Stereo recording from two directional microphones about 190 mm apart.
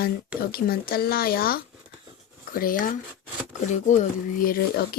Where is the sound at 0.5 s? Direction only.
50° left (ahead or behind).